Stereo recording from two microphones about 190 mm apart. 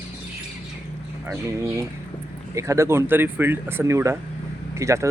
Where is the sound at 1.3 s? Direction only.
15° right (ahead or behind).